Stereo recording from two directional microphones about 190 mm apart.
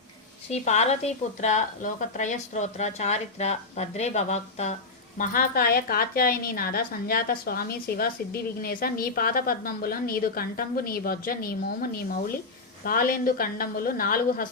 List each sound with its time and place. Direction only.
0.5 s a woman's voice: 35° left (ahead or behind)